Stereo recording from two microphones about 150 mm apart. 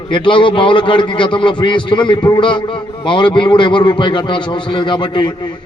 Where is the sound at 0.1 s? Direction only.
35° left (ahead or behind).